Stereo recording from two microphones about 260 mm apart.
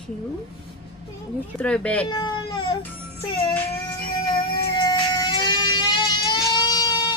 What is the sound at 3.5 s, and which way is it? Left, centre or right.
Speech, centre.